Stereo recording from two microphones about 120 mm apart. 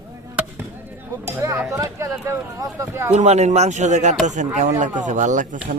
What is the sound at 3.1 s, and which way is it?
Speech, 65° right (ahead or behind).